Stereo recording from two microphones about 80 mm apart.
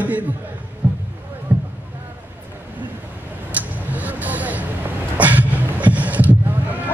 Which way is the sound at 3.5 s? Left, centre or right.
Centre.